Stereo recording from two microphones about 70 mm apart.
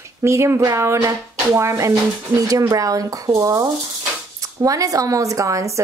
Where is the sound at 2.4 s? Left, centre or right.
Right.